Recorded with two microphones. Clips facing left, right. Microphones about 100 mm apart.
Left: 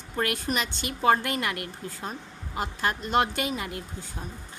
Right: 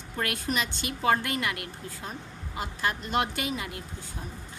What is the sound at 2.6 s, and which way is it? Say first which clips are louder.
A woman's voice: left 2 dB; 35° left (ahead or behind).